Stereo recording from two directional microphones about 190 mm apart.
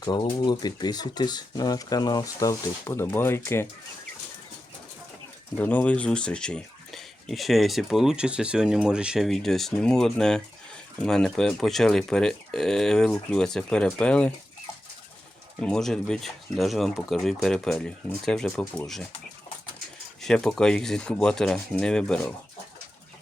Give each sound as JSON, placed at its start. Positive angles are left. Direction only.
{"t": 0.0, "sound": "speech", "side_deg": 20}
{"t": 5.5, "sound": "speech", "side_deg": 10}
{"t": 15.6, "sound": "speech", "side_deg": 5}
{"t": 20.2, "sound": "speech", "side_deg": 5}